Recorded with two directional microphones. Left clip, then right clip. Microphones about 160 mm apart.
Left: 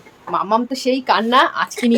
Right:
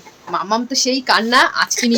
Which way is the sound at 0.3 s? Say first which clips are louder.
Left 1 dB; 5° left (ahead or behind).